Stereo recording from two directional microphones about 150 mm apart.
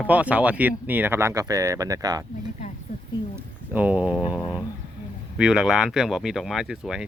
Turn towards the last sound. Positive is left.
turn(degrees=-5)  # may be behind; listen again after turning